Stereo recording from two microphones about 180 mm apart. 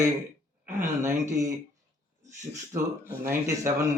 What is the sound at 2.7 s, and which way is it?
Speech, 15° right (ahead or behind).